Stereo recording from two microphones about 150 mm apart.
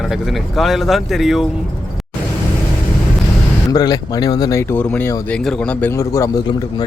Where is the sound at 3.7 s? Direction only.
25° left (ahead or behind).